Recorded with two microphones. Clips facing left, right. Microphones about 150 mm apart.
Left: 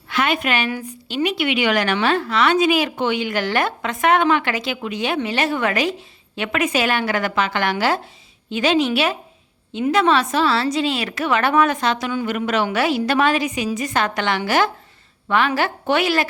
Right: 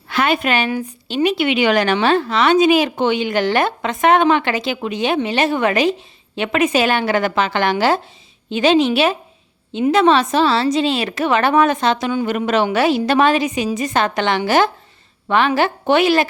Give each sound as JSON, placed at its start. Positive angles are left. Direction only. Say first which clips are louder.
{"t": 0.1, "sound": "a woman's voice", "louder": "right 3 dB", "side_deg": -35}